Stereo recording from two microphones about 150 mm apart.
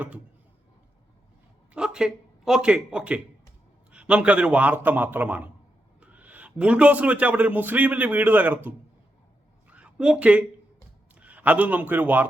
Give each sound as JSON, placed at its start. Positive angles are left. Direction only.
{"t": 1.7, "sound": "a man's voice", "side_deg": -5}
{"t": 9.6, "sound": "a sound", "side_deg": -10}
{"t": 11.2, "sound": "a man's voice", "side_deg": -10}